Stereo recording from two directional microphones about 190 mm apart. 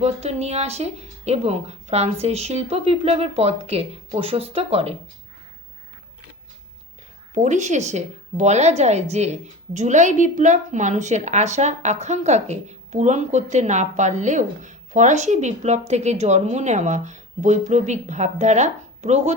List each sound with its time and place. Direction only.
0.0 s a woman's voice: 35° right (ahead or behind)
7.3 s a woman's voice: 40° right (ahead or behind)